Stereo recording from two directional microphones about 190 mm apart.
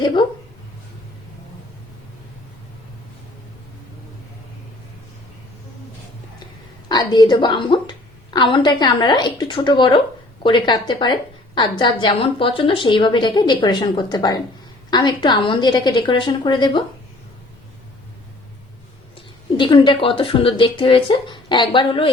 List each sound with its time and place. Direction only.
0.0 s a woman's voice: 25° left (ahead or behind)
6.8 s a woman's voice: 20° left (ahead or behind)
19.1 s a woman's voice: 25° left (ahead or behind)